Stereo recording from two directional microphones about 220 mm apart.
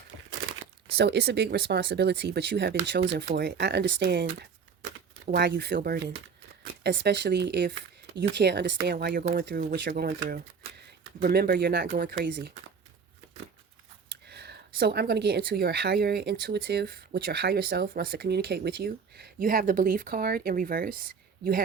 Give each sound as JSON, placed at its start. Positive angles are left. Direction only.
{"t": 0.9, "sound": "speech", "side_deg": -50}
{"t": 14.1, "sound": "speech", "side_deg": -50}